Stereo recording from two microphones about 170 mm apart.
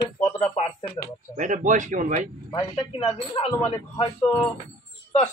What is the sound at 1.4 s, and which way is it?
Speech, 50° right (ahead or behind).